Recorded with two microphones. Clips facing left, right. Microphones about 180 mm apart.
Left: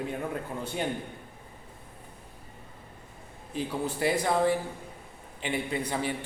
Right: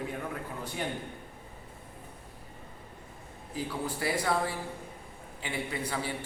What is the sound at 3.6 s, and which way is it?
Speech, 20° left (ahead or behind).